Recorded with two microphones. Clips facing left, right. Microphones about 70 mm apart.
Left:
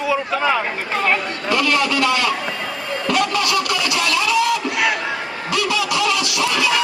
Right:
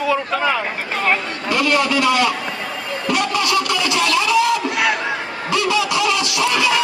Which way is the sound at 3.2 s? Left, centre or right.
Right.